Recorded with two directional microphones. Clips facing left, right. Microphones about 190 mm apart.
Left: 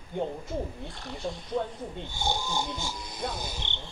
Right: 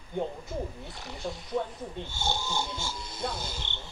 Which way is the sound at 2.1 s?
15° left (ahead or behind).